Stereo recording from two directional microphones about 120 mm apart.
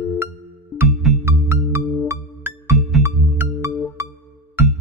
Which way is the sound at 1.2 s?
20° right (ahead or behind).